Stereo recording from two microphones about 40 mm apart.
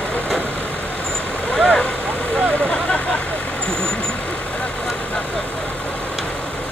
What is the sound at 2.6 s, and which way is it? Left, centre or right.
Vehicle, left.